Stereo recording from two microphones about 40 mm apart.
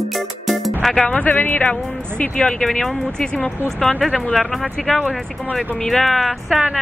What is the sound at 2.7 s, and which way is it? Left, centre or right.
Speech, centre.